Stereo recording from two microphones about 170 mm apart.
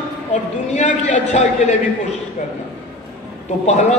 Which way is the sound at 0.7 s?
45° left (ahead or behind).